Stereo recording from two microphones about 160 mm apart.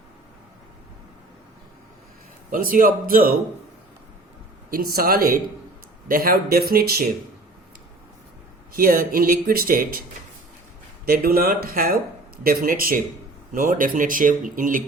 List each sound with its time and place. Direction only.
2.5 s speech: 60° right (ahead or behind)
4.7 s speech: 65° right (ahead or behind)
8.7 s speech: 60° right (ahead or behind)
11.0 s speech: 65° right (ahead or behind)